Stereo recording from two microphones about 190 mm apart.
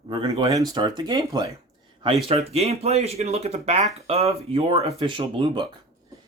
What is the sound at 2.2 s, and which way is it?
Speech, 30° right (ahead or behind).